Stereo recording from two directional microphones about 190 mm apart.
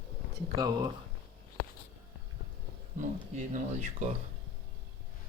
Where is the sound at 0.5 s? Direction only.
20° right (ahead or behind).